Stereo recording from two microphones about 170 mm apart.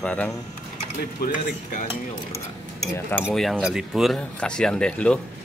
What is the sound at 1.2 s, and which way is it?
Speech, 50° left (ahead or behind).